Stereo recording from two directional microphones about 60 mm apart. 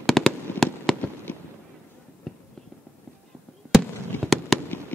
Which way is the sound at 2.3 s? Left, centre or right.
Centre.